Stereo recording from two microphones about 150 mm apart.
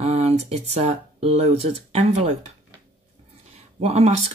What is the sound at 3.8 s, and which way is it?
Speech, 45° right (ahead or behind).